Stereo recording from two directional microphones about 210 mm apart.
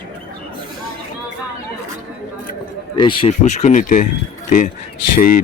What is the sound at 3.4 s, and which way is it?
Speech, 35° left (ahead or behind).